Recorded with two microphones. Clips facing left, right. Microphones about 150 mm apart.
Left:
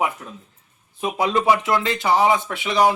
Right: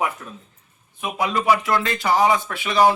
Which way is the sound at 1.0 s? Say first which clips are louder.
Left 2 dB; 30° left (ahead or behind).